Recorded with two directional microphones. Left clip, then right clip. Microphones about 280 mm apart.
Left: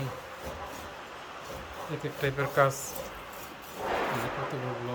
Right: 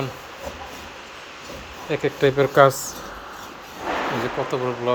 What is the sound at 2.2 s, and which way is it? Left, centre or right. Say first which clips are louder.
Speech: right 11 dB; right.